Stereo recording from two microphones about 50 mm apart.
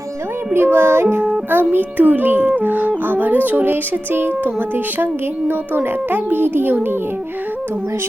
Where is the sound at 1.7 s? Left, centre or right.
Right.